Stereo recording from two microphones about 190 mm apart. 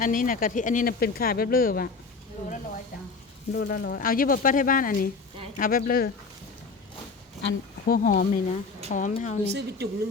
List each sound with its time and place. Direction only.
0.0 s speech: 45° left (ahead or behind)
3.5 s speech: 60° left (ahead or behind)
7.9 s a woman's voice: 50° left (ahead or behind)
9.5 s a woman's voice: 60° right (ahead or behind)